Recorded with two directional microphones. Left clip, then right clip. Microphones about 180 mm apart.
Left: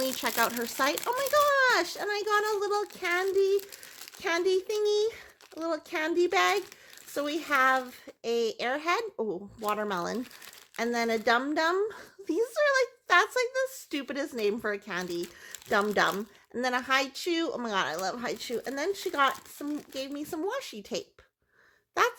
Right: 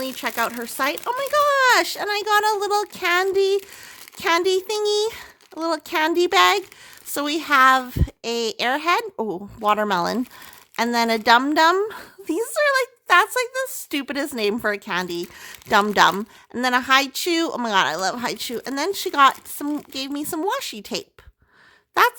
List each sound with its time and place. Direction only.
0.2 s speech: 15° right (ahead or behind); by 22.1 s 35° right (ahead or behind)